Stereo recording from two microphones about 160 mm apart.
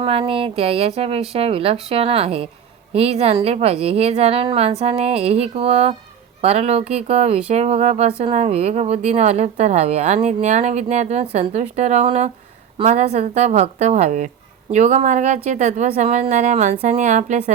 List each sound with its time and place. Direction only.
0.0 s a woman's voice: 35° right (ahead or behind)